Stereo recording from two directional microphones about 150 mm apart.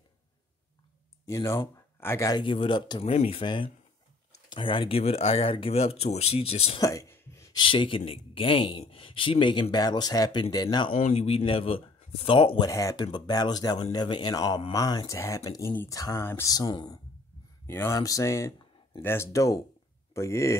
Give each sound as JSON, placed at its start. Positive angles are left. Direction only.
{"t": 1.2, "sound": "speech", "side_deg": 20}
{"t": 3.1, "sound": "speech", "side_deg": 45}
{"t": 6.8, "sound": "a sound", "side_deg": 20}
{"t": 7.6, "sound": "speech", "side_deg": 35}
{"t": 10.9, "sound": "a man's voice", "side_deg": 65}
{"t": 11.1, "sound": "speech", "side_deg": 40}